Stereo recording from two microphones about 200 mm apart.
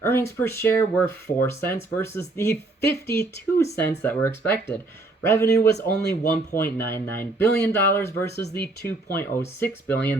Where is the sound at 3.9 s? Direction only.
10° left (ahead or behind).